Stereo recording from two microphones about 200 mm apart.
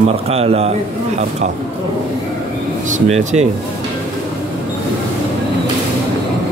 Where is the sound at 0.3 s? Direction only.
30° right (ahead or behind).